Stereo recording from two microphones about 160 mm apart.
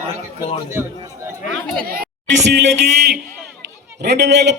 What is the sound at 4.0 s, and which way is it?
Speech, 90° right.